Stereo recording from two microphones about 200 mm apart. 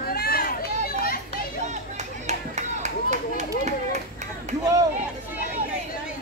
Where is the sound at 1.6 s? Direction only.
35° right (ahead or behind).